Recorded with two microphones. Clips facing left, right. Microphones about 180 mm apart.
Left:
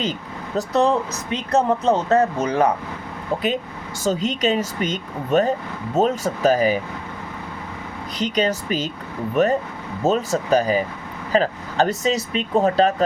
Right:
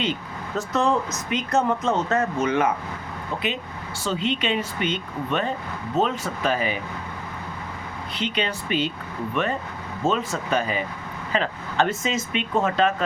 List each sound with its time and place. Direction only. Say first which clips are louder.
0.0 s speech: left 1 dB; 35° left (ahead or behind)
4.0 s speech: left 5 dB; 40° left (ahead or behind)
8.2 s speech: left 6 dB; 40° left (ahead or behind)